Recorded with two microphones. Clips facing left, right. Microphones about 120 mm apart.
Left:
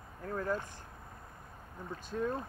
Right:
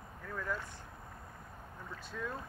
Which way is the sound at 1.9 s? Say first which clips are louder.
Left 7 dB; 45° left (ahead or behind).